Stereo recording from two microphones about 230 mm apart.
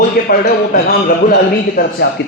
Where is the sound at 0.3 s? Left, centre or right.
Left.